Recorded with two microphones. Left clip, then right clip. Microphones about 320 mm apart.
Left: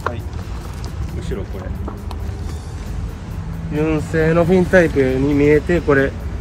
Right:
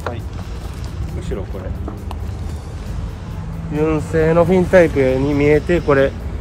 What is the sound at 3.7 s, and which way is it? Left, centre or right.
Speech, right.